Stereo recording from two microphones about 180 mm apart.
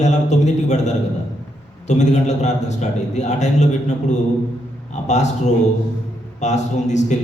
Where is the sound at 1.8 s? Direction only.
40° left (ahead or behind).